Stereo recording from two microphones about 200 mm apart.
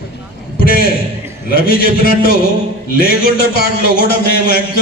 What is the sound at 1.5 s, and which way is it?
A man's voice, 50° left (ahead or behind).